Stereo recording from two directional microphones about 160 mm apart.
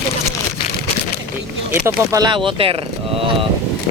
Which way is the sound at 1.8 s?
20° right (ahead or behind).